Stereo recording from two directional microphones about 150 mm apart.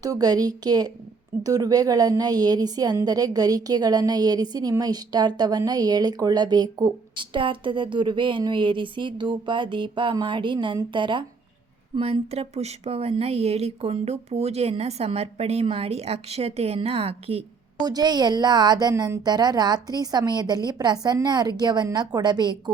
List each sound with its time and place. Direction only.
0.0 s a woman's voice: 25° right (ahead or behind); by 17.4 s 40° right (ahead or behind)
17.7 s a woman's voice: 25° right (ahead or behind)